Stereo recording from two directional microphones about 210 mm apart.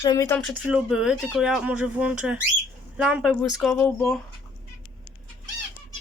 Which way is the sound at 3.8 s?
10° left (ahead or behind).